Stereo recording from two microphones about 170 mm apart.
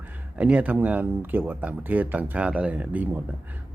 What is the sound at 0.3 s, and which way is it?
Speech, 10° right (ahead or behind).